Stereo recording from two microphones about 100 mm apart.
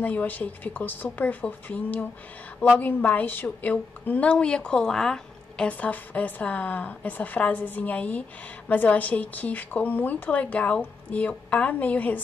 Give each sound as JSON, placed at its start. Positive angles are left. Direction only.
{"t": 0.0, "sound": "a woman's voice", "side_deg": 15}